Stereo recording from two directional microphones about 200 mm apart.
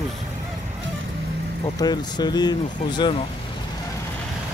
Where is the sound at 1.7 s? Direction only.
20° left (ahead or behind).